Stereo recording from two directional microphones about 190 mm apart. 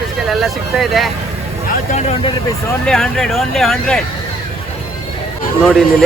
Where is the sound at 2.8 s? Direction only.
Centre (ahead or behind).